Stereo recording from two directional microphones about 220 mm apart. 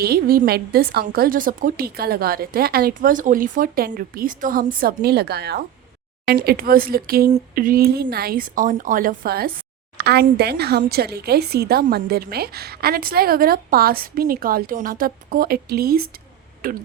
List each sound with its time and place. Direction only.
0.0 s a woman's voice: 45° right (ahead or behind)